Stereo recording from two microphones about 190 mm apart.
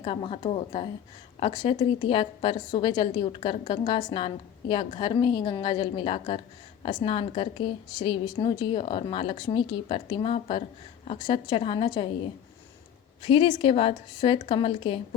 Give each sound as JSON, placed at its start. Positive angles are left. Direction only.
{"t": 0.0, "sound": "a woman's voice", "side_deg": 30}